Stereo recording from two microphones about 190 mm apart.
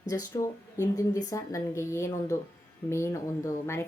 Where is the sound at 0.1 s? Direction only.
20° left (ahead or behind).